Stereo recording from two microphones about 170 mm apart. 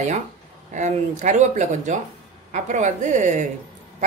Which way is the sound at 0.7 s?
45° right (ahead or behind).